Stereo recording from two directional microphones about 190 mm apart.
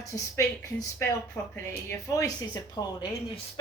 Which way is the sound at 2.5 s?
20° left (ahead or behind).